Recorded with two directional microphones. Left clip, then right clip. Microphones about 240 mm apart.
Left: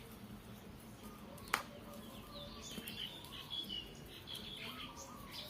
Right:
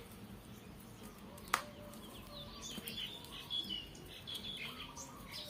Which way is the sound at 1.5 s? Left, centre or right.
Centre.